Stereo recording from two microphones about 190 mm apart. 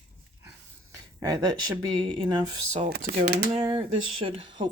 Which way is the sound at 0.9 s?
15° right (ahead or behind).